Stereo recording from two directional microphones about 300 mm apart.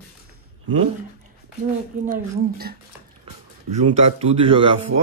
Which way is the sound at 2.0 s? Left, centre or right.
Right.